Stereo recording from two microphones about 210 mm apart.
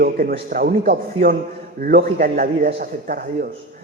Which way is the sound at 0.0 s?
45° right (ahead or behind).